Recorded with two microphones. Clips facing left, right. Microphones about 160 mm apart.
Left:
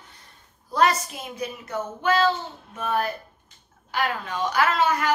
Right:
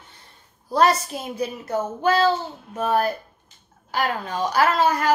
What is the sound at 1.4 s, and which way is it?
A woman's voice, 35° right (ahead or behind).